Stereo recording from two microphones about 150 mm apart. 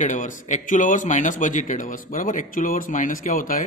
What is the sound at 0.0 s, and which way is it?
Speech, 60° left (ahead or behind).